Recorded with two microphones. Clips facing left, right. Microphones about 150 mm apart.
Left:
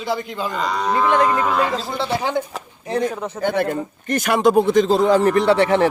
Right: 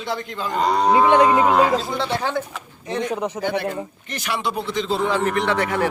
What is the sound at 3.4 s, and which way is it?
Speech, 50° left (ahead or behind).